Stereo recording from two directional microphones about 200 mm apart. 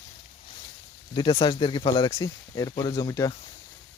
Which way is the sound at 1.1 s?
20° left (ahead or behind).